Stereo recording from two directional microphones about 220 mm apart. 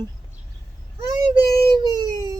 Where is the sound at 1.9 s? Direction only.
20° right (ahead or behind).